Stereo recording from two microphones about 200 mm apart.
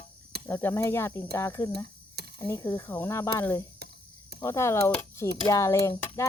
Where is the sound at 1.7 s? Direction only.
55° right (ahead or behind).